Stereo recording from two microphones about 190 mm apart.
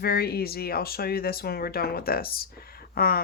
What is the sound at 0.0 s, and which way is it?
Speech, 55° left (ahead or behind).